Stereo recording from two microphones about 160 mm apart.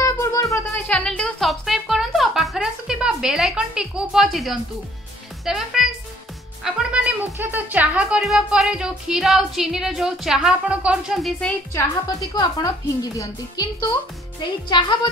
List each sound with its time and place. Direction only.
0.0 s music: 20° left (ahead or behind)
0.8 s music: 5° left (ahead or behind)
5.4 s a woman's voice: centre (ahead or behind)
12.2 s a woman's voice: 20° left (ahead or behind)